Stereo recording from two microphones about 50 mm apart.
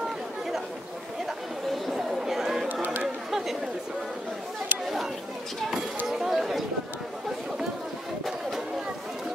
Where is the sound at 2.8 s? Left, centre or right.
Right.